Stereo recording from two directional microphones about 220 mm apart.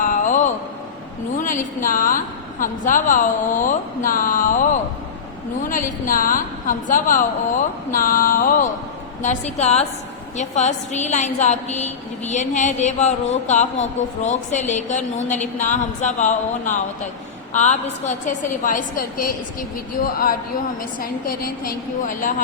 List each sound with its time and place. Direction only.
0.0 s a sound: 35° left (ahead or behind)
1.4 s a woman's voice: 35° left (ahead or behind)
21.0 s a woman's voice: 40° left (ahead or behind)